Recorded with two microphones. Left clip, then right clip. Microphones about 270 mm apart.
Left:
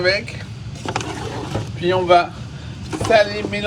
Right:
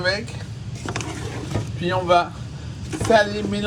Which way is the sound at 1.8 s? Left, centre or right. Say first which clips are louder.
Left 4 dB; centre.